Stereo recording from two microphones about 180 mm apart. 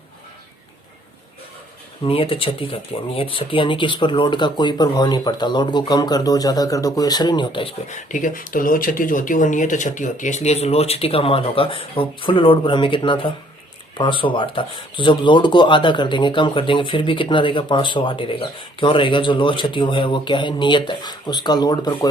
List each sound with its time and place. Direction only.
2.0 s speech: 30° left (ahead or behind)
7.9 s speech: 45° left (ahead or behind); by 21.9 s 20° left (ahead or behind)